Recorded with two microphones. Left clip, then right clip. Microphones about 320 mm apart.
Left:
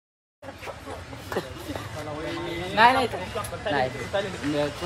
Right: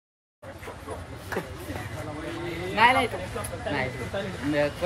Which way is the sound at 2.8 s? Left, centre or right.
Centre.